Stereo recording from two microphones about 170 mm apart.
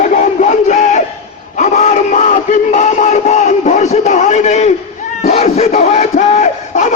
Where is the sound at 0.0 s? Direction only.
45° left (ahead or behind).